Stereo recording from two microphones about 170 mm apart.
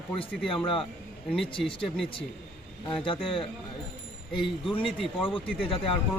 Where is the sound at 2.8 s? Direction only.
30° left (ahead or behind).